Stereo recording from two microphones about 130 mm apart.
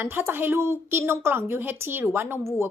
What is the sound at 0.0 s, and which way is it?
A woman's voice, 15° right (ahead or behind).